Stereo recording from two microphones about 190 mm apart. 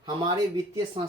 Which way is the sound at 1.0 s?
30° right (ahead or behind).